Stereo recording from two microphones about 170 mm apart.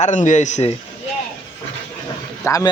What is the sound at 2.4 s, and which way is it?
Speech, 20° left (ahead or behind).